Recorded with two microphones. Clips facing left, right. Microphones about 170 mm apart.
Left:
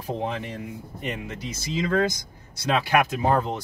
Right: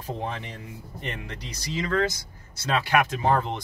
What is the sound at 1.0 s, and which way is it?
Speech, 5° left (ahead or behind).